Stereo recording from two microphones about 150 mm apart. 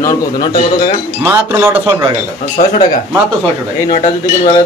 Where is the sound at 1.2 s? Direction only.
15° right (ahead or behind).